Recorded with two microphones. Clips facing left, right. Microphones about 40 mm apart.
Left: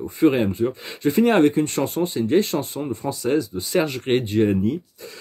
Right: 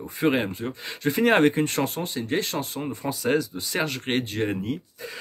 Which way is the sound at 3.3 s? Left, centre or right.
Centre.